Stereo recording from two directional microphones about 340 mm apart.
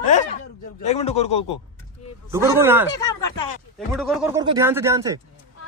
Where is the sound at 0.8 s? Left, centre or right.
Centre.